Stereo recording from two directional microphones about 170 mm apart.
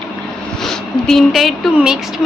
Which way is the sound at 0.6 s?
Centre (ahead or behind).